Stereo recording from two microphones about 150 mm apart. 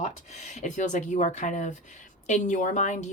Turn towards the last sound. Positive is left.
turn(degrees=55)  # may be behind; listen again after turning